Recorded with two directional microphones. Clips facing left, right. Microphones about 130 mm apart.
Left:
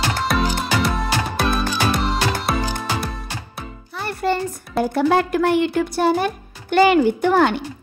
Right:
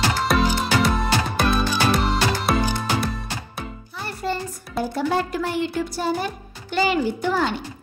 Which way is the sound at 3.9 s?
65° left (ahead or behind).